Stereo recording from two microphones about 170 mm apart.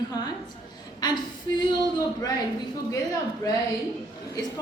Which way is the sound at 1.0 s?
25° left (ahead or behind).